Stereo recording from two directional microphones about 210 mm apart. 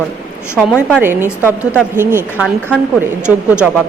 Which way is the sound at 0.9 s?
10° right (ahead or behind).